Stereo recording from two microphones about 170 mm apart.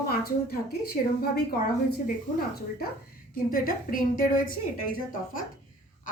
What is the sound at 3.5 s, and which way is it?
A woman's voice, 55° left (ahead or behind).